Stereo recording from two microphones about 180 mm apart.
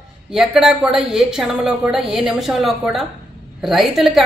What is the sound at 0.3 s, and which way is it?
A woman's voice, centre (ahead or behind).